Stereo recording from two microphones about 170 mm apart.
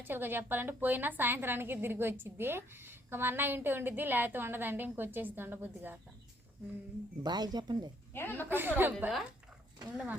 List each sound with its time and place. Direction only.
0.0 s a woman's voice: 10° right (ahead or behind)
7.2 s speech: 25° right (ahead or behind)
8.1 s a woman's voice: 10° left (ahead or behind)
8.4 s a woman's voice: 10° right (ahead or behind)